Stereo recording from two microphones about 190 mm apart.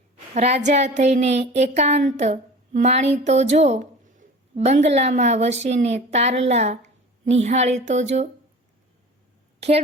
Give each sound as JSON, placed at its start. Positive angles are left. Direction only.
{"t": 0.3, "sound": "a sound", "side_deg": -35}
{"t": 2.2, "sound": "a woman's voice", "side_deg": -35}
{"t": 9.6, "sound": "a woman's voice", "side_deg": -35}